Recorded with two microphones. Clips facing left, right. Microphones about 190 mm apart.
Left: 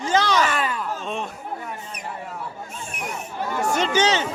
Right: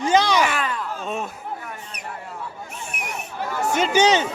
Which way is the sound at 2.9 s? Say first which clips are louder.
Left 1 dB; 75° right (ahead or behind).